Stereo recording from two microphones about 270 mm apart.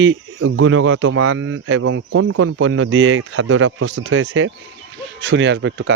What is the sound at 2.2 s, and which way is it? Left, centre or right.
Speech, right.